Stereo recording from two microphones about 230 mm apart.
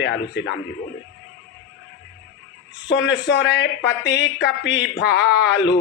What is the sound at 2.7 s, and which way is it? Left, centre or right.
A man's voice, left.